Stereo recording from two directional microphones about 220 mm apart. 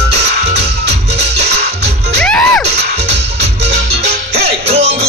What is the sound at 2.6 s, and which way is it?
Music, 50° right (ahead or behind).